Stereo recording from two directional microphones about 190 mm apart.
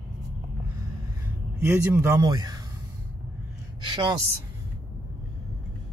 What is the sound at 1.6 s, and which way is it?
A man's voice, 10° right (ahead or behind).